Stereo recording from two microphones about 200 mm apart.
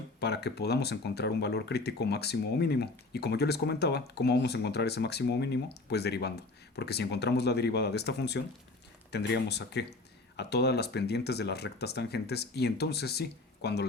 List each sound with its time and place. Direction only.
0.2 s speech: 55° left (ahead or behind)